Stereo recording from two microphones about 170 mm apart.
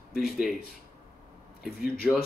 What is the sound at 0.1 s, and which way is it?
Speech, 5° right (ahead or behind).